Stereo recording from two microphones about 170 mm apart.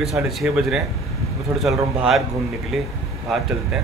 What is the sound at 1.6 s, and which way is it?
Speech, centre (ahead or behind).